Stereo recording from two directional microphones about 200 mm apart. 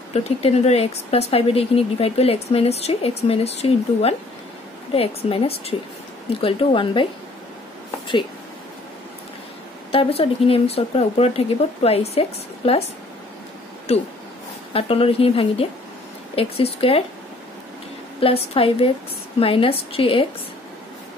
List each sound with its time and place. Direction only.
0.1 s speech: 30° left (ahead or behind)
9.8 s speech: 30° left (ahead or behind)
13.9 s speech: 30° left (ahead or behind)
18.2 s speech: 30° left (ahead or behind)